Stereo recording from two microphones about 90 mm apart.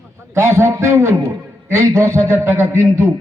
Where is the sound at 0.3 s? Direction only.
30° right (ahead or behind).